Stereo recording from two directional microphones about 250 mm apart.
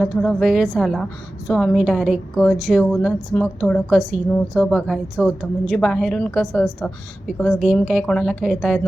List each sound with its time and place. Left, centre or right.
0.0 s a woman's voice: centre